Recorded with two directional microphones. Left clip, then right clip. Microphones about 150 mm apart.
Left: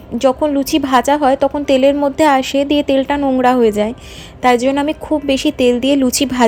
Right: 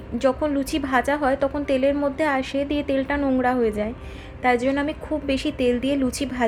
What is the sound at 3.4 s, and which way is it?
A woman's voice, 40° left (ahead or behind).